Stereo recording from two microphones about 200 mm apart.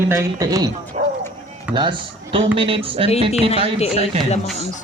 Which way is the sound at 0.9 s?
35° right (ahead or behind).